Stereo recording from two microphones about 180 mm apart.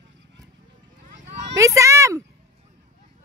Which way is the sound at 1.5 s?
15° right (ahead or behind).